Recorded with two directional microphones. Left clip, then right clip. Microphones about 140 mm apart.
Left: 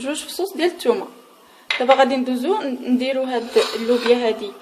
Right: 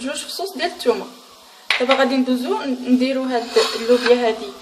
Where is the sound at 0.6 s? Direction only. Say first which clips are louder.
Left 1 dB; 50° left (ahead or behind).